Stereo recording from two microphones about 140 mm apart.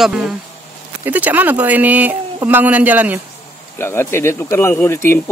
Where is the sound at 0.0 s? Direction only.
Centre (ahead or behind).